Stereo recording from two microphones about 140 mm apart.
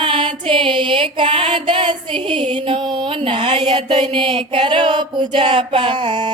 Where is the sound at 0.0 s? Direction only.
35° right (ahead or behind).